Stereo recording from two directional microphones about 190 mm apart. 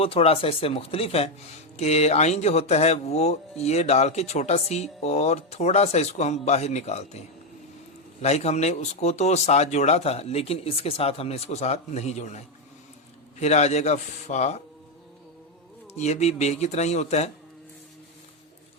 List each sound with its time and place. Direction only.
0.0 s speech: 30° left (ahead or behind)
8.2 s speech: 35° left (ahead or behind)
16.0 s speech: 35° left (ahead or behind)